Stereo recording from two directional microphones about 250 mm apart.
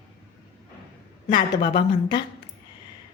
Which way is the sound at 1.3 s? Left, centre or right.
Centre.